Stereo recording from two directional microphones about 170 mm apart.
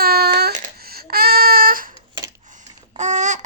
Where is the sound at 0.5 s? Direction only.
55° right (ahead or behind).